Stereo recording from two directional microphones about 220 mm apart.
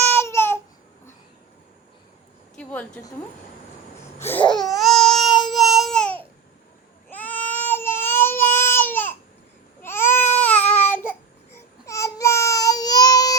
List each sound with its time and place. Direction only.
0.1 s babbling: 10° left (ahead or behind)
2.6 s a woman's voice: 5° left (ahead or behind)
4.4 s baby cry: 20° left (ahead or behind)
4.7 s baby cry: centre (ahead or behind)
5.5 s babbling: centre (ahead or behind)
7.1 s baby cry: 10° left (ahead or behind)
11.9 s a sound: 15° left (ahead or behind)